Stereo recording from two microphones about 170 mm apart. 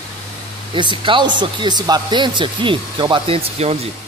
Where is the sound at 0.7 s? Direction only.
30° right (ahead or behind).